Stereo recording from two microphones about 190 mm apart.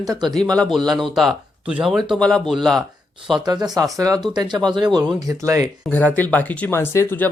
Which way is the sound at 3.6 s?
20° right (ahead or behind).